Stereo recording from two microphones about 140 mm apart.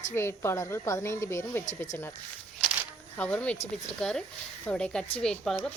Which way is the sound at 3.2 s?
10° left (ahead or behind).